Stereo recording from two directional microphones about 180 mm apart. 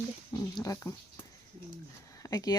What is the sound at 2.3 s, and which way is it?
Speech, 20° left (ahead or behind).